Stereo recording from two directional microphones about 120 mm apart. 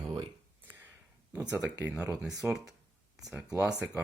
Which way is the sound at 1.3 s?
10° right (ahead or behind).